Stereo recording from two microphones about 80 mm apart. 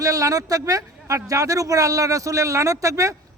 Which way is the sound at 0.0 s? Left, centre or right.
Right.